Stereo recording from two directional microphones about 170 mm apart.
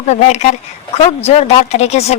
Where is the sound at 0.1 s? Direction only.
40° left (ahead or behind).